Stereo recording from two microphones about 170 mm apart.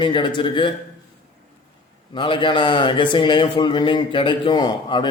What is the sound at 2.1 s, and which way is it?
A man's voice, 30° left (ahead or behind).